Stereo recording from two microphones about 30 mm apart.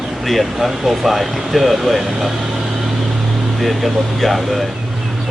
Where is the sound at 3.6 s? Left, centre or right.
Centre.